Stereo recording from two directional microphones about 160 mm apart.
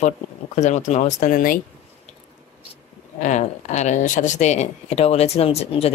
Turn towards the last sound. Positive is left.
turn(degrees=40)  # may be behind; listen again after turning